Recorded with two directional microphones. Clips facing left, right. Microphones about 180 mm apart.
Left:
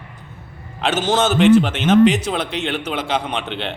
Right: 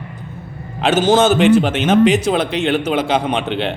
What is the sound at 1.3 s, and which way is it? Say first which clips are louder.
A man's voice: right 1 dB; 5° right (ahead or behind).